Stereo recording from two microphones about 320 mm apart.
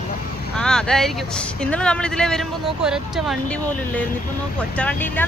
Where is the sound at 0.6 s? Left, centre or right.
Centre.